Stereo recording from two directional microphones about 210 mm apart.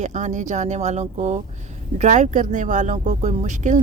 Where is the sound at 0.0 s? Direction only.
35° right (ahead or behind).